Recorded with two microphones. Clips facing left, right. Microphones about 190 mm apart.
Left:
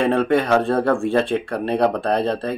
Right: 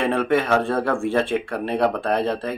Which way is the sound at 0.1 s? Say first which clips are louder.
Left 2 dB; 15° left (ahead or behind).